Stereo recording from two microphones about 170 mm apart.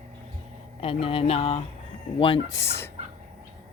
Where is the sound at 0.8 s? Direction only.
35° left (ahead or behind).